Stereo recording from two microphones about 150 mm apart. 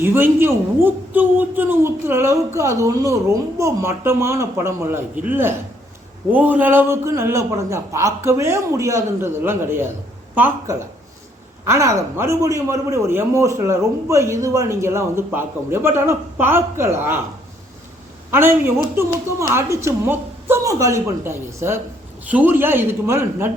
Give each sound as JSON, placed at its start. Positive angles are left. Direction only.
{"t": 0.0, "sound": "a man's voice", "side_deg": -15}
{"t": 18.3, "sound": "a man's voice", "side_deg": -15}